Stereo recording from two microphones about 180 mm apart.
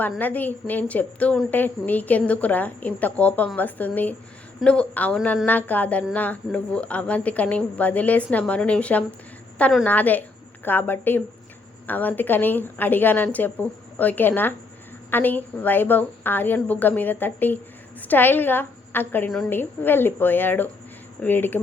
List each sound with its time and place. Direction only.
0.2 s a woman's voice: 10° left (ahead or behind)